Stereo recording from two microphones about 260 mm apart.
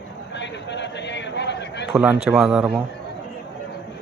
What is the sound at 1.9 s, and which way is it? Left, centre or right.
Speech, centre.